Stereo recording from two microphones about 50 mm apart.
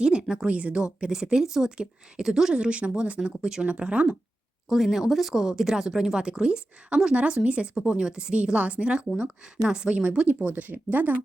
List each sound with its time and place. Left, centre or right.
0.0 s speech: centre
0.5 s speech: right
0.8 s a woman's voice: centre
4.7 s a woman's voice: centre
10.4 s speech: right